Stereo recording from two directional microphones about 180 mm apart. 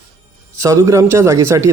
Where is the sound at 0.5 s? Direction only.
15° right (ahead or behind).